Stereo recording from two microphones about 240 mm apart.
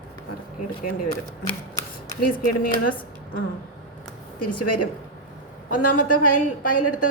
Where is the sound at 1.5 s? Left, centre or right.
Centre.